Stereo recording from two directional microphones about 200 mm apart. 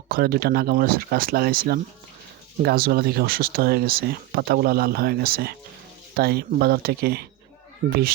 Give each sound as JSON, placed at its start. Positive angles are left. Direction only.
{"t": 0.1, "sound": "speech", "side_deg": -50}